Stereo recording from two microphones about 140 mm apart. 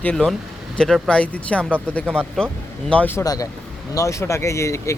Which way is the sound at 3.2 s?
25° left (ahead or behind).